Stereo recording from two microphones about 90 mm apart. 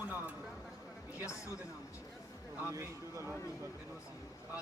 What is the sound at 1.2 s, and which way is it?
Speech, 35° left (ahead or behind).